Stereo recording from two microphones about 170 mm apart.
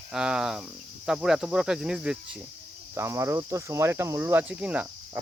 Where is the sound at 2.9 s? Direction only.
15° right (ahead or behind).